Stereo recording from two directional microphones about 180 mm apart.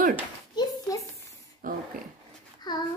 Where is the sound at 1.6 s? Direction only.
50° right (ahead or behind).